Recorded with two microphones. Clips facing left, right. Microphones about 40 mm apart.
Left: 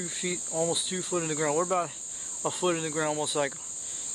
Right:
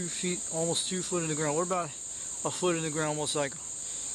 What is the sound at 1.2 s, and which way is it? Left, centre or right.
Cricket, centre.